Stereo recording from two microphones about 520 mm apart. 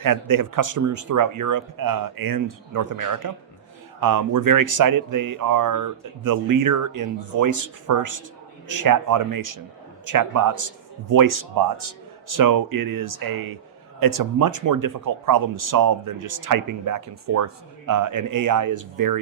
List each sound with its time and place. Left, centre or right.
0.0 s speech: right